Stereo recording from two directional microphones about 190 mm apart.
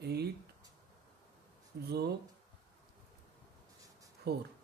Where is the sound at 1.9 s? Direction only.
60° right (ahead or behind).